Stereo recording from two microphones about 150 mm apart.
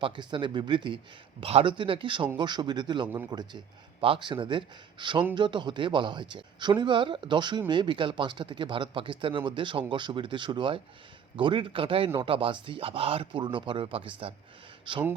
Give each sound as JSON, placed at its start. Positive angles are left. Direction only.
{"t": 0.0, "sound": "speech", "side_deg": -35}